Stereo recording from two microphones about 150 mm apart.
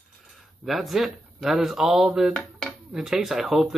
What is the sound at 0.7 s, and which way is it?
Speech, centre (ahead or behind).